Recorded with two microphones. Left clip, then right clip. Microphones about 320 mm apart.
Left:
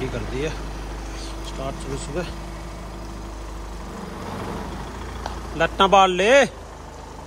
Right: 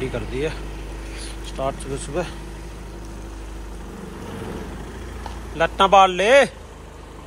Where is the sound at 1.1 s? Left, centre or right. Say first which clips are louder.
Right 2 dB; centre.